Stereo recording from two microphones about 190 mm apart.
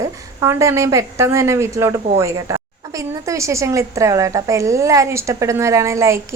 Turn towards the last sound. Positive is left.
turn(degrees=-15)  # may be behind; listen again after turning